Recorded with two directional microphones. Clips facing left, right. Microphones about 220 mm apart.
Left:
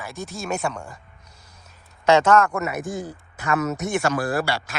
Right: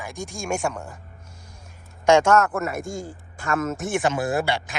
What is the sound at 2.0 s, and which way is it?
Speech, 10° right (ahead or behind).